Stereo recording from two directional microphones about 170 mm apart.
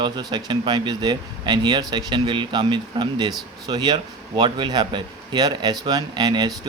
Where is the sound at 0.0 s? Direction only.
25° right (ahead or behind).